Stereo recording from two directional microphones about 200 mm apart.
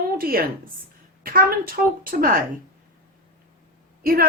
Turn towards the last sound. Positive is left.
turn(degrees=-45)  # may be behind; listen again after turning